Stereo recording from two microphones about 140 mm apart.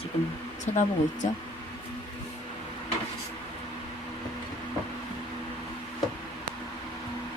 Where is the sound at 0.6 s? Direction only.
60° left (ahead or behind).